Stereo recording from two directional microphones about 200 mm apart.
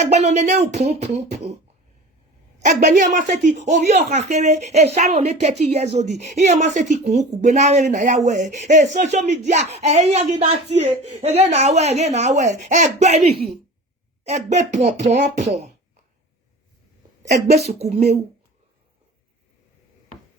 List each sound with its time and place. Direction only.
0.0 s speech: 35° right (ahead or behind)
2.6 s speech: 35° right (ahead or behind)
17.2 s speech: 35° right (ahead or behind)